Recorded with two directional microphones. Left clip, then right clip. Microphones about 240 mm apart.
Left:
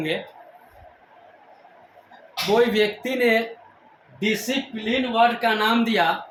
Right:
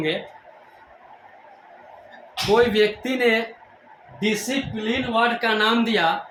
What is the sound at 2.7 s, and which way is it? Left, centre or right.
Speech, centre.